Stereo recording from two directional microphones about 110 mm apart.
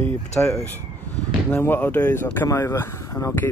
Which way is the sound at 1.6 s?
20° left (ahead or behind).